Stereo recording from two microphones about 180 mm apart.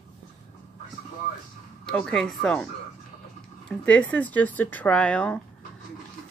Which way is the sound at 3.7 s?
5° left (ahead or behind).